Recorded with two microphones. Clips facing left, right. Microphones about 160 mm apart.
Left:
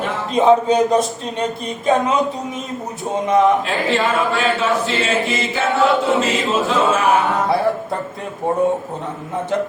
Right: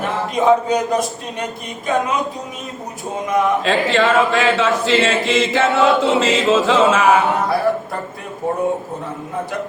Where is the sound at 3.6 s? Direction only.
90° right.